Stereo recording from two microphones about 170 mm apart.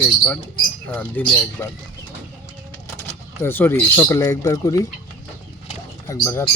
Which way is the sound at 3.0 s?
15° left (ahead or behind).